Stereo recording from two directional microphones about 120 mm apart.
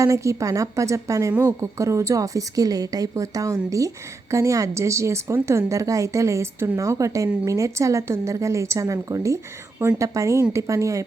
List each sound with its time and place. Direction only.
0.0 s a woman's voice: 25° right (ahead or behind)